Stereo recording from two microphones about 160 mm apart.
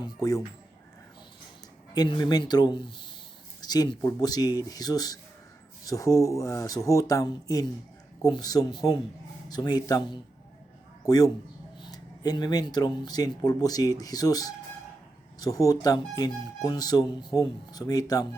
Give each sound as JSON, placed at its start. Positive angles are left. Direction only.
{"t": 0.0, "sound": "a man's voice", "side_deg": 20}
{"t": 1.9, "sound": "a man's voice", "side_deg": 25}